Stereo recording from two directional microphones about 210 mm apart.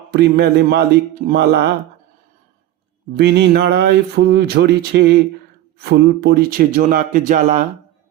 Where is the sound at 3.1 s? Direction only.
50° right (ahead or behind).